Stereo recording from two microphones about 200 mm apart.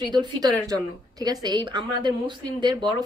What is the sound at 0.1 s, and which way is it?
Speech, 20° right (ahead or behind).